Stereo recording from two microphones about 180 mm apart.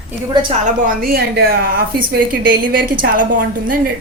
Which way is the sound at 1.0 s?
55° right (ahead or behind).